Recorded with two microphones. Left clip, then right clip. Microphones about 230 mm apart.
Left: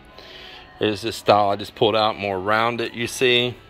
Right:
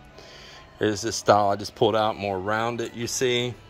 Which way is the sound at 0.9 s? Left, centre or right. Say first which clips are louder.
Left 2 dB; right.